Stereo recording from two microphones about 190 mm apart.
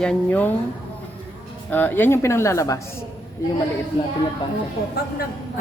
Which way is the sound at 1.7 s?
10° left (ahead or behind).